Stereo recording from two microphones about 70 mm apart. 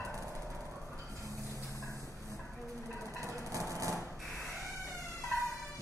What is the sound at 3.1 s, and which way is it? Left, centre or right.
Train, right.